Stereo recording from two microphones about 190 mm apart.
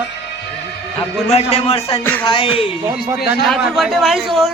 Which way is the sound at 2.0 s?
10° left (ahead or behind).